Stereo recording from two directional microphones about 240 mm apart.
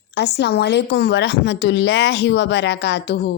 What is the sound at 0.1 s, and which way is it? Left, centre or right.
Speech, left.